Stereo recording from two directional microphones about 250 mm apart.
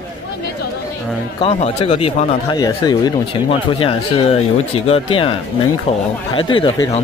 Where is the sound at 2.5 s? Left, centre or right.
Centre.